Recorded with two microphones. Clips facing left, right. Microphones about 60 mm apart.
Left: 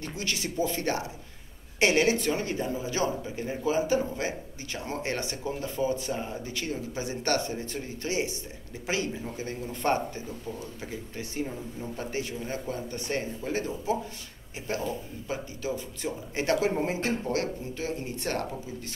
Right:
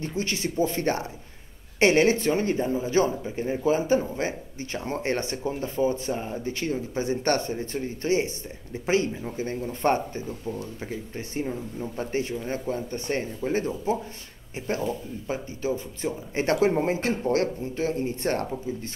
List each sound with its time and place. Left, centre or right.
0.0 s a man's voice: right